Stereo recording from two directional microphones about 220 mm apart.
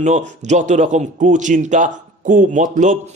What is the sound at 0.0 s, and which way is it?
Speech, 35° right (ahead or behind).